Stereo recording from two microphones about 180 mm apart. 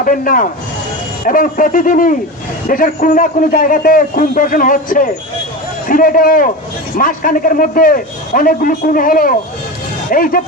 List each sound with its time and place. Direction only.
0.0 s a man's voice: 50° left (ahead or behind)